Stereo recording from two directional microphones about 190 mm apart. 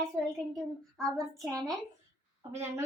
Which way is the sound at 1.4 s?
20° right (ahead or behind).